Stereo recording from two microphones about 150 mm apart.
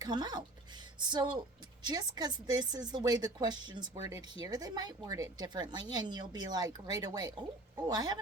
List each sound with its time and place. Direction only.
0.0 s speech: 25° right (ahead or behind)